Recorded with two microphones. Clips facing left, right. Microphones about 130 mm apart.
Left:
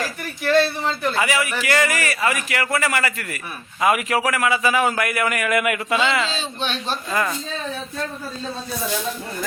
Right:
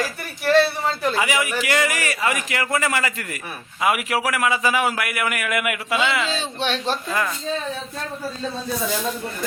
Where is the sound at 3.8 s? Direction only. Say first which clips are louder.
Left 2 dB; 10° right (ahead or behind).